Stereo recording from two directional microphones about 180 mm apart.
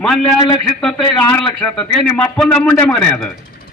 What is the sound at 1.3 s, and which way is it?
A man's voice, 10° left (ahead or behind).